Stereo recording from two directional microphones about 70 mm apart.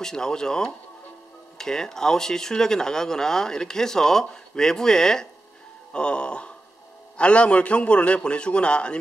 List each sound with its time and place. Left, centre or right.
0.0 s speech: centre